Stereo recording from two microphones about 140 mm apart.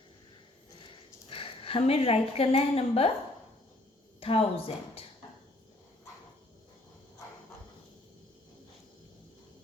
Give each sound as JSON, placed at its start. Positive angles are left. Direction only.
{"t": 1.3, "sound": "a woman's voice", "side_deg": 40}
{"t": 4.2, "sound": "speech", "side_deg": 45}